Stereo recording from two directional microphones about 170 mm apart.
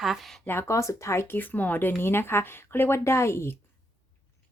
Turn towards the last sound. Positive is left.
turn(degrees=15)  # may be behind; listen again after turning